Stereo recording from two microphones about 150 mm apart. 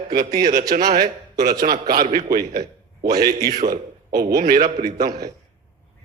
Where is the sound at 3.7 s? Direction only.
90° right.